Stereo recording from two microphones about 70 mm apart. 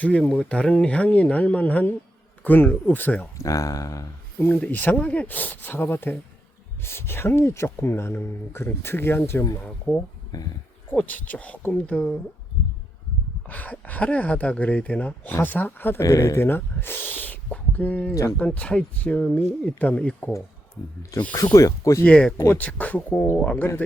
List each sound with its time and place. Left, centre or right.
0.0 s speech: centre
3.3 s speech: left
4.4 s speech: left
9.6 s speech: left
10.3 s speech: left
10.9 s speech: left
13.5 s speech: left
16.0 s speech: left
16.5 s speech: left
18.1 s speech: left
18.3 s speech: centre
21.5 s speech: left
22.0 s speech: centre